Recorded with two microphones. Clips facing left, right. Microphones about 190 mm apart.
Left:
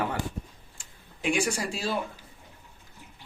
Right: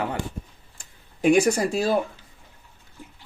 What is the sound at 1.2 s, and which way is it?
Speech, 40° right (ahead or behind).